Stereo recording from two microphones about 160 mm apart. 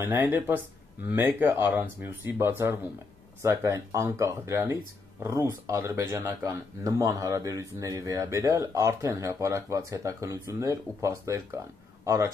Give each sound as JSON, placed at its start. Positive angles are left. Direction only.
{"t": 0.0, "sound": "speech", "side_deg": -10}